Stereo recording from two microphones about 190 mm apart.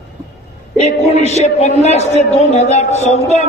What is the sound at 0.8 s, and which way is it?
A man's voice, 35° left (ahead or behind).